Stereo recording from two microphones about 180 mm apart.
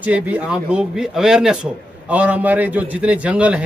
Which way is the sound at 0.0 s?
10° right (ahead or behind).